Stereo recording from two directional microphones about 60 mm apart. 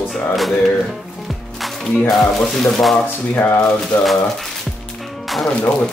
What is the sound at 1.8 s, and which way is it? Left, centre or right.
Speech, centre.